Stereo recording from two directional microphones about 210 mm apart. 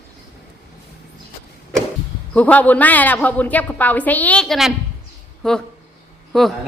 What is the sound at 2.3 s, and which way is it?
A woman's voice, 5° left (ahead or behind).